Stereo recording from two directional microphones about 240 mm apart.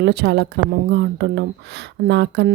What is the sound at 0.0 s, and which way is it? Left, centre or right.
Speech, right.